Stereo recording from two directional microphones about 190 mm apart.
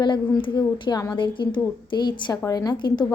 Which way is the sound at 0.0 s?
25° left (ahead or behind).